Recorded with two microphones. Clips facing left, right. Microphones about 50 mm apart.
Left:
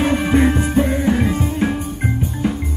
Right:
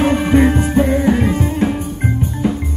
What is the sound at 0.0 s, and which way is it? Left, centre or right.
Music, centre.